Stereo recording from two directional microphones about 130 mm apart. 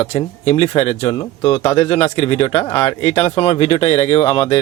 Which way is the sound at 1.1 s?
40° left (ahead or behind).